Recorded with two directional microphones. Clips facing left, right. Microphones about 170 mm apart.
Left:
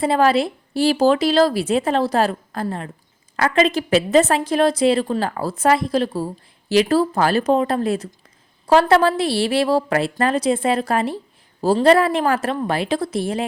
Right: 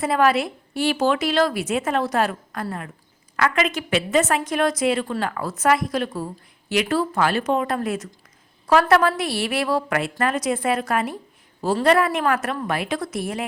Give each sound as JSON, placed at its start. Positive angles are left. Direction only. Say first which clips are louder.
{"t": 0.0, "sound": "a woman's voice", "louder": "left 3 dB", "side_deg": 30}